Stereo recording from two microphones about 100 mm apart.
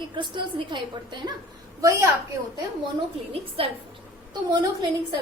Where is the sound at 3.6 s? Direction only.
70° right (ahead or behind).